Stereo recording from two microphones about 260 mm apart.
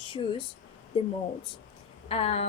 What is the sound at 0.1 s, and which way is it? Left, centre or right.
Speech, centre.